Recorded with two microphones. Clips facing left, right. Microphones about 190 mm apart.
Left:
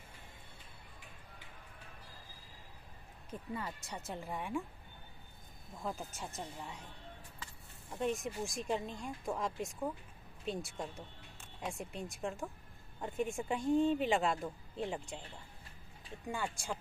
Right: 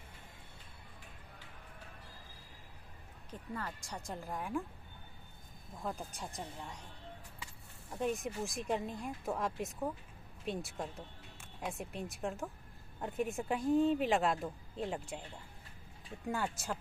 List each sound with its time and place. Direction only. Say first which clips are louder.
3.3 s speech: left 1 dB; 10° left (ahead or behind)
5.8 s speech: even; centre (ahead or behind)
7.9 s speech: even; centre (ahead or behind)
16.3 s speech: right 2 dB; 5° right (ahead or behind)